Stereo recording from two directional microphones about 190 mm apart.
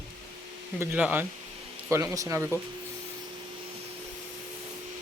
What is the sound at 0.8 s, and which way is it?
Speech, 10° right (ahead or behind).